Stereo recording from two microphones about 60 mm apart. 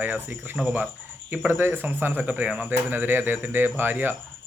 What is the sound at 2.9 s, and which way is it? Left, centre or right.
Speech, right.